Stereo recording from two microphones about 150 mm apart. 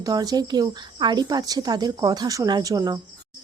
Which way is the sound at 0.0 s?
25° right (ahead or behind).